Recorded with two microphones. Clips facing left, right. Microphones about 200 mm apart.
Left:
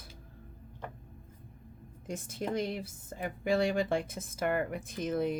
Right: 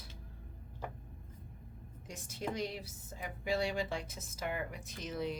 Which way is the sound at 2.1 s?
55° left (ahead or behind).